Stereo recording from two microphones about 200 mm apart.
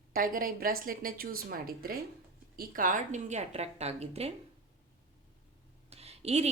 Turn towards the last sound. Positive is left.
turn(degrees=-30)  # may be behind; listen again after turning